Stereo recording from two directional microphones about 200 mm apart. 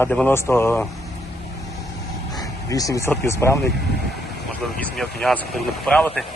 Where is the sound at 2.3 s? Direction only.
15° left (ahead or behind).